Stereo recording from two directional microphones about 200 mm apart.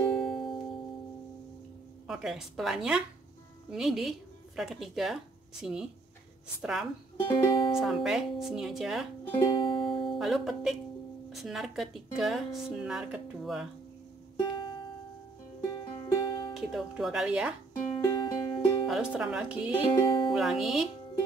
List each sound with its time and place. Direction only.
0.0 s music: 5° left (ahead or behind)
2.0 s speech: centre (ahead or behind)
7.2 s music: 25° left (ahead or behind)
7.8 s speech: centre (ahead or behind)
9.4 s music: 25° left (ahead or behind)
10.1 s speech: centre (ahead or behind)
15.6 s music: 15° left (ahead or behind)
16.5 s speech: centre (ahead or behind)
18.2 s music: 20° left (ahead or behind)
18.9 s speech: 5° right (ahead or behind)
19.8 s music: 25° left (ahead or behind)
20.3 s speech: centre (ahead or behind)